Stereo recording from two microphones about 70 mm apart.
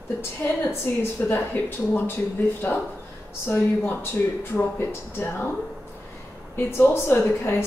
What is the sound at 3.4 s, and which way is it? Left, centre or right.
A woman's voice, left.